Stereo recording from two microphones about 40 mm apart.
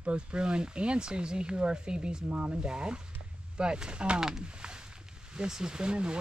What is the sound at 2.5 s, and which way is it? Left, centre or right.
Speech, right.